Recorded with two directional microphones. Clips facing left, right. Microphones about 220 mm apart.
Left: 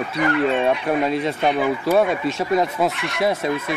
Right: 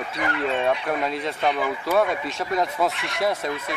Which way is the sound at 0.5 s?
25° left (ahead or behind).